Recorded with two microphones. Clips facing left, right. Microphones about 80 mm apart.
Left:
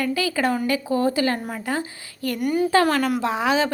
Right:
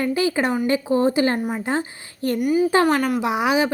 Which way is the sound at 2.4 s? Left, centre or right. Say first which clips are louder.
Right 1 dB; centre.